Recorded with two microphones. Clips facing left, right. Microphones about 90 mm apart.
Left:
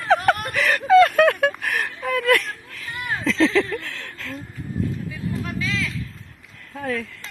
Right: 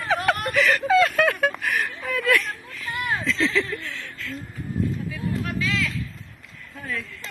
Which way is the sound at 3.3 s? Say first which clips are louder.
Left 9 dB; 35° left (ahead or behind).